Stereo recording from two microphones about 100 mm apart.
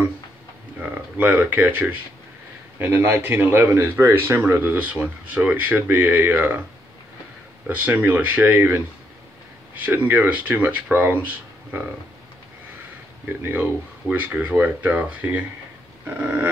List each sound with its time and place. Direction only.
1.1 s speech: 20° right (ahead or behind)
7.6 s speech: 15° right (ahead or behind)
13.4 s speech: 20° right (ahead or behind)